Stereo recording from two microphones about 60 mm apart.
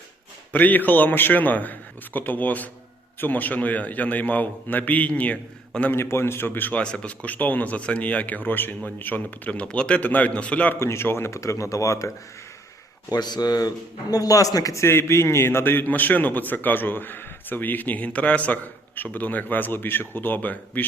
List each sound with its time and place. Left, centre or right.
0.5 s a man's voice: left
5.9 s a man's voice: left
6.8 s a man's voice: centre
10.8 s speech: left
11.3 s speech: left
13.6 s speech: left
14.8 s a man's voice: left